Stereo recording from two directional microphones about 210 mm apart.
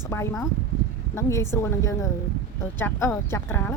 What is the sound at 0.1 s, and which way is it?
Speech, 10° left (ahead or behind).